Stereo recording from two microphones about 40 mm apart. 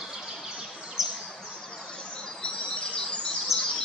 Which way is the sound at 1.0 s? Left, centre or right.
Centre.